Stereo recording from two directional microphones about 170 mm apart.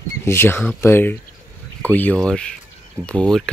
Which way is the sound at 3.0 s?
15° right (ahead or behind).